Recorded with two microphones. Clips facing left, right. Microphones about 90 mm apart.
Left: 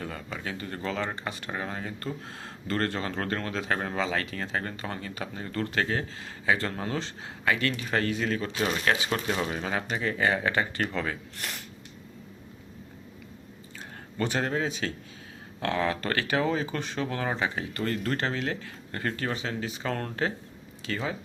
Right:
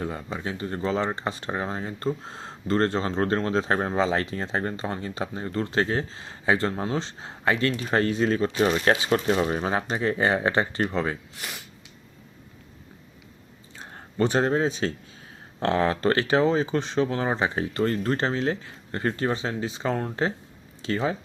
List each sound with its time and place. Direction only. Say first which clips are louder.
0.0 s speech: right 5 dB; 25° right (ahead or behind)
11.3 s speech: even; 5° right (ahead or behind)
13.7 s speech: right 6 dB; 30° right (ahead or behind)
20.8 s speech: right 6 dB; 30° right (ahead or behind)